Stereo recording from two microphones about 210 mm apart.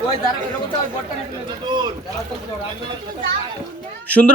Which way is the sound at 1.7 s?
20° right (ahead or behind).